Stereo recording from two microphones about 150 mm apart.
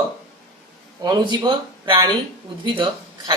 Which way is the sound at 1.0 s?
30° right (ahead or behind).